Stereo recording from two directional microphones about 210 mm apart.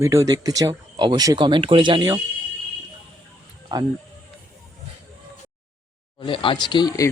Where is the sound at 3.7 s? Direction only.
20° right (ahead or behind).